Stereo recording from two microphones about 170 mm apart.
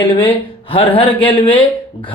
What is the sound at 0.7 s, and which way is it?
Speech, 30° left (ahead or behind).